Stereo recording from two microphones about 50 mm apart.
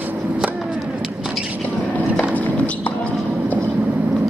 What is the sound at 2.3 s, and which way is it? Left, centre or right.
Clip-clop, left.